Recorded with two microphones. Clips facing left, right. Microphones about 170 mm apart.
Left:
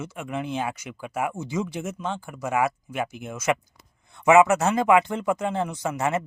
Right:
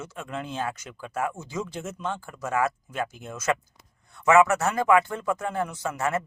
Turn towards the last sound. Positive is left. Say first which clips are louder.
# left 2 dB
turn(degrees=20)  # may be behind; listen again after turning